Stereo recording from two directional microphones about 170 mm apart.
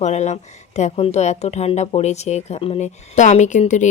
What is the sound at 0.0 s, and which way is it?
A woman's voice, 40° left (ahead or behind).